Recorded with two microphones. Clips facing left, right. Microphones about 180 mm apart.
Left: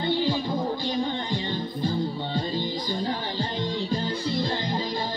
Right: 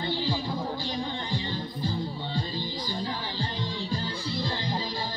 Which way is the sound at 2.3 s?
20° left (ahead or behind).